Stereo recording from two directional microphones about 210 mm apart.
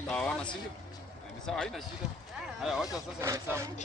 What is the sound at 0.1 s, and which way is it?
Speech, 5° left (ahead or behind).